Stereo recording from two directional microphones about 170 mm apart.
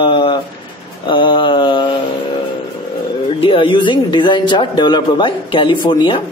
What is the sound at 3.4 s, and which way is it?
A woman's voice, 30° left (ahead or behind).